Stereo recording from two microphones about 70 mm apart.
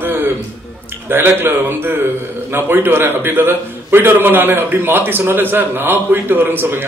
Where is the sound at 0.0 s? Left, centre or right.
Right.